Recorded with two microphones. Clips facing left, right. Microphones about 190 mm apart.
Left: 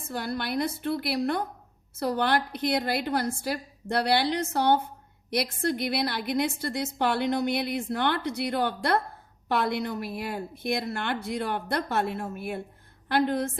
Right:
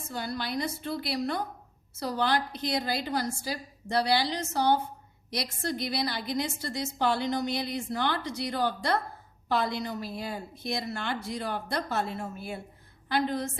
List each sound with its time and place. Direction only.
0.1 s a woman's voice: 60° left (ahead or behind)